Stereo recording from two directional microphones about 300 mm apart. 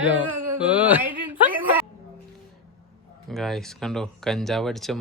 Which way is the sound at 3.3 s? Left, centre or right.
Centre.